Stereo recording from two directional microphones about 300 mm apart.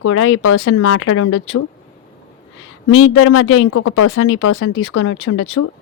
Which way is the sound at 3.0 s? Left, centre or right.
Left.